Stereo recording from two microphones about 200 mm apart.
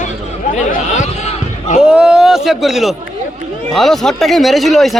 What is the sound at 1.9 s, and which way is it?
Speech, 5° right (ahead or behind).